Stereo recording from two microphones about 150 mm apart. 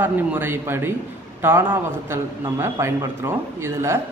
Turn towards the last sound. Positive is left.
turn(degrees=-15)  # may be behind; listen again after turning